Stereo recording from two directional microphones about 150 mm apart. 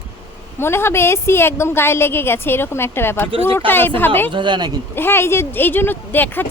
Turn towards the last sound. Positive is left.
turn(degrees=15)  # may be behind; listen again after turning